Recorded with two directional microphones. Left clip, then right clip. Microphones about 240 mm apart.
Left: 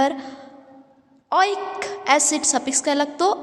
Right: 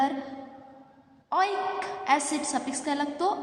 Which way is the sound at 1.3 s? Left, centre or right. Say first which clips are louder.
Left 6 dB; left.